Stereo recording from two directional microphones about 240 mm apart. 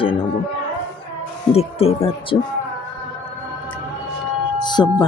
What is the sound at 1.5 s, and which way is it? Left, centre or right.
Speech, left.